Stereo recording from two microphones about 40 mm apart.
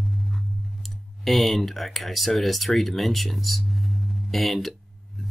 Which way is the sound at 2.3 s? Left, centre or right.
Centre.